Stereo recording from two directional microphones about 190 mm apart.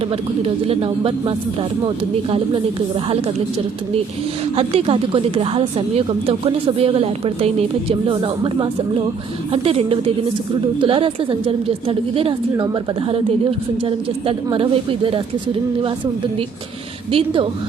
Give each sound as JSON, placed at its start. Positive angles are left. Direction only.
{"t": 0.1, "sound": "a woman's voice", "side_deg": -30}
{"t": 3.1, "sound": "a woman's voice", "side_deg": -30}
{"t": 4.5, "sound": "a woman's voice", "side_deg": -30}
{"t": 17.1, "sound": "a woman's voice", "side_deg": -30}